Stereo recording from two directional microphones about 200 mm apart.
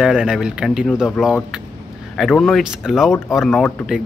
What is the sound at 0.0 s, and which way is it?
Speech, 5° right (ahead or behind).